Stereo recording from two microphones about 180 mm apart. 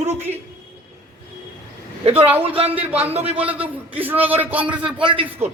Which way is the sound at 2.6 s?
10° right (ahead or behind).